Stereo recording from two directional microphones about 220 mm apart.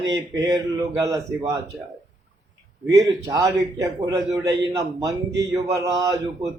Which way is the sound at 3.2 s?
15° right (ahead or behind).